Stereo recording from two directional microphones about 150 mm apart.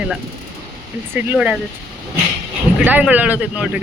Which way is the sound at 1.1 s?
10° right (ahead or behind).